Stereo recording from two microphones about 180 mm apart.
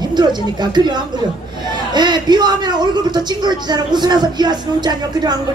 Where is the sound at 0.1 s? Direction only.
25° right (ahead or behind).